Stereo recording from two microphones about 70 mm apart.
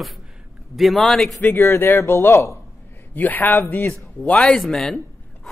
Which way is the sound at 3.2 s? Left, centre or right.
Left.